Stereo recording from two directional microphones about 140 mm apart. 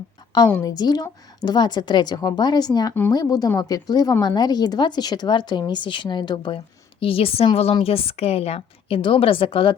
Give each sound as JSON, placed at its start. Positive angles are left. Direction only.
{"t": 0.4, "sound": "a woman's voice", "side_deg": 15}
{"t": 0.7, "sound": "a woman's voice", "side_deg": 30}